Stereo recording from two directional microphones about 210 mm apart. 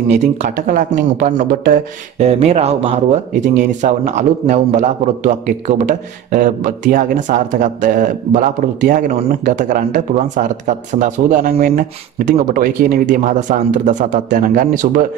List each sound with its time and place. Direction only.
0.1 s speech: 35° right (ahead or behind)